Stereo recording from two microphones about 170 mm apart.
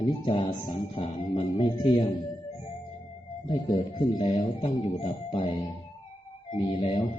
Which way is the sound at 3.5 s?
25° left (ahead or behind).